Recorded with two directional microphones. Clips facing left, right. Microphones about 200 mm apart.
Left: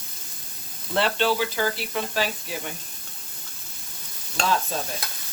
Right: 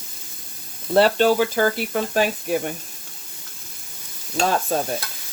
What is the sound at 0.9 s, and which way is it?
Speech, 45° right (ahead or behind).